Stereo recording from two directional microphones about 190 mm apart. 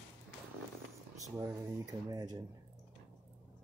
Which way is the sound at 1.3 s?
15° right (ahead or behind).